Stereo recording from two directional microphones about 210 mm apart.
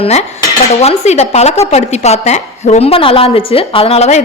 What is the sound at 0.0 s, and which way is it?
Cutlery, 30° left (ahead or behind).